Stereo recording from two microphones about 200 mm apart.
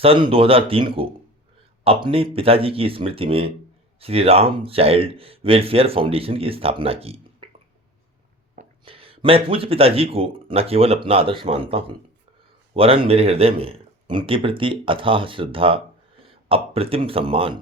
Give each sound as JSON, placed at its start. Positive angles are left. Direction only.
{"t": 0.0, "sound": "speech", "side_deg": -30}
{"t": 8.8, "sound": "speech", "side_deg": -25}